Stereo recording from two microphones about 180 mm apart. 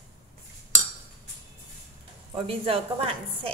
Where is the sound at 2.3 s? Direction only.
30° right (ahead or behind).